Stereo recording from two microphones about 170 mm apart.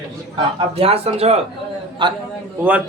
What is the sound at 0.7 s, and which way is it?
Speech, 35° right (ahead or behind).